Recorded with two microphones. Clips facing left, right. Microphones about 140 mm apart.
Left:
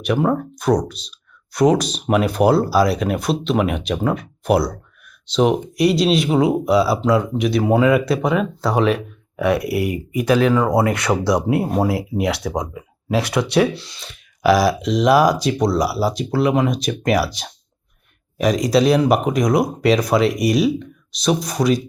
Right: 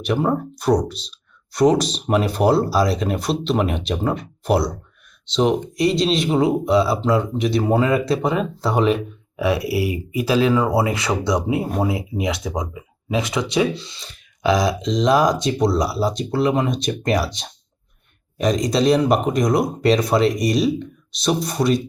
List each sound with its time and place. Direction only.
0.0 s speech: centre (ahead or behind)
9.6 s speech: 25° right (ahead or behind)
9.9 s speech: 45° left (ahead or behind)
10.5 s speech: 5° right (ahead or behind)
11.9 s speech: 70° left (ahead or behind)
12.4 s speech: centre (ahead or behind)
13.1 s speech: 70° left (ahead or behind)
14.0 s speech: 5° left (ahead or behind)